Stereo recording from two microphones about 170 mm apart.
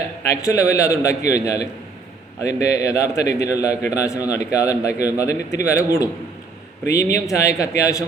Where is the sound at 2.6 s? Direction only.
20° left (ahead or behind).